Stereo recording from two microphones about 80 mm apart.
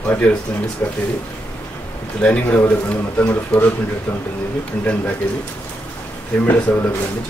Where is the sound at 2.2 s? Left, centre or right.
Centre.